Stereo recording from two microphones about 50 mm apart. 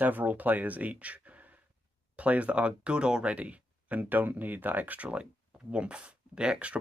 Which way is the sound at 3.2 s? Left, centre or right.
Right.